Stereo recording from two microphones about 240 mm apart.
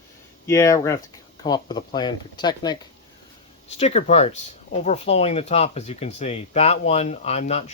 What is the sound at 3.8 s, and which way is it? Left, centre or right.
Speech, left.